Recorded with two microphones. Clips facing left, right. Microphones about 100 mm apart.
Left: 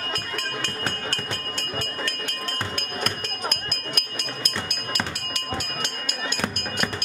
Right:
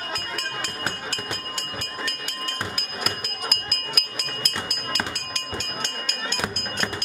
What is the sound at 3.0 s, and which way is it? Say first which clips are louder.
Music: left 1 dB; 5° right (ahead or behind).